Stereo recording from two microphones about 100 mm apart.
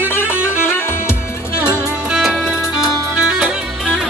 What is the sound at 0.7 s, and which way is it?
Music, 25° left (ahead or behind).